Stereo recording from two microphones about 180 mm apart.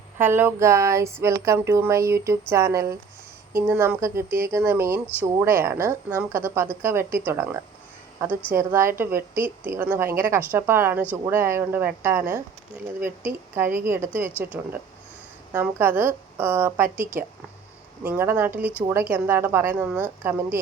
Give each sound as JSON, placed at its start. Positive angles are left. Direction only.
{"t": 0.2, "sound": "a woman's voice", "side_deg": -10}
{"t": 15.5, "sound": "a woman's voice", "side_deg": -10}
{"t": 16.8, "sound": "speech", "side_deg": -50}
{"t": 18.0, "sound": "a woman's voice", "side_deg": -10}